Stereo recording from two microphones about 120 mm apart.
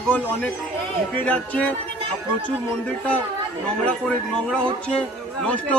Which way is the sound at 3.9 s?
5° left (ahead or behind).